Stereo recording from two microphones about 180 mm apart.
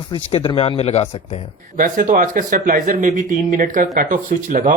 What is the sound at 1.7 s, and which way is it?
Speech, 45° right (ahead or behind).